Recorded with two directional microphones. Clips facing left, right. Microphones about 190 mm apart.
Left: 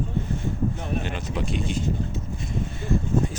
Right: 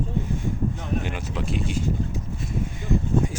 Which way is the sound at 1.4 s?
5° right (ahead or behind).